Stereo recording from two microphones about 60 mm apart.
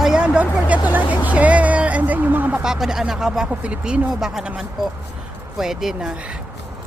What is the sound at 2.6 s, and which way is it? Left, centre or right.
Speech, centre.